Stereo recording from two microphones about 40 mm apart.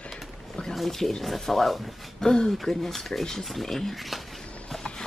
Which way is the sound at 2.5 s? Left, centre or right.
Centre.